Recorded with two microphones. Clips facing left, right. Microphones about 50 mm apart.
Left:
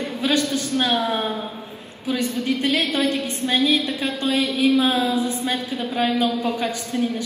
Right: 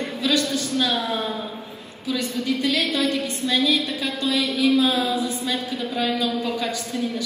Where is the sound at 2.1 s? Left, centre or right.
Left.